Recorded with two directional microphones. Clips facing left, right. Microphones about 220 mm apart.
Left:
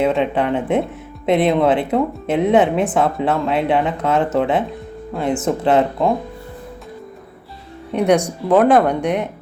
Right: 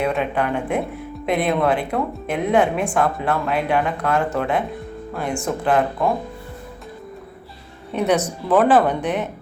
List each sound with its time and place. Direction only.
0.0 s speech: 20° left (ahead or behind)
7.9 s speech: 15° left (ahead or behind)